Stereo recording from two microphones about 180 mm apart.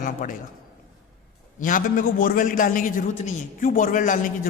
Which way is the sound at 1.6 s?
50° left (ahead or behind).